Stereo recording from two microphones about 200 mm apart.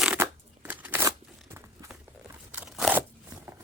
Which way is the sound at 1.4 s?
15° right (ahead or behind).